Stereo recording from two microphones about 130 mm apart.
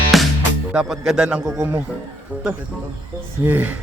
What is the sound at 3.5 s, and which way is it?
Speech, 15° right (ahead or behind).